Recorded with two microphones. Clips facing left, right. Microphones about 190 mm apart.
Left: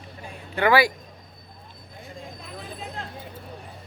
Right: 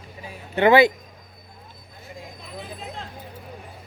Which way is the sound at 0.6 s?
20° right (ahead or behind).